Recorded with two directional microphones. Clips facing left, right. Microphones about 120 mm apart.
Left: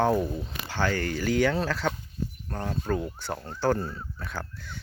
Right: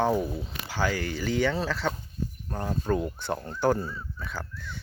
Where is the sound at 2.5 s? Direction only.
10° right (ahead or behind).